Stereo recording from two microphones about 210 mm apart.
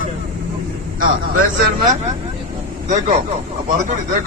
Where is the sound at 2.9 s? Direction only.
40° right (ahead or behind).